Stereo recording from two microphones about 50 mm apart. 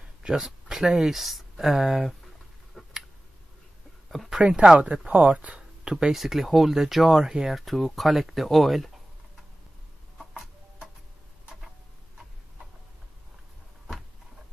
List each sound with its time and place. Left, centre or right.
0.4 s speech: centre
2.7 s tick: centre
4.1 s a sound: centre
4.4 s speech: centre
5.9 s speech: centre
6.1 s speech: centre
10.1 s music: centre